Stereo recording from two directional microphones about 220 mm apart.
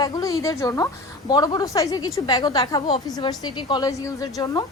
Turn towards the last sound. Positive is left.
turn(degrees=15)  # may be behind; listen again after turning